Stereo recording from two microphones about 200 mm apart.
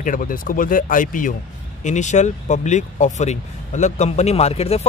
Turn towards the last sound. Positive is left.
turn(degrees=30)  # may be behind; listen again after turning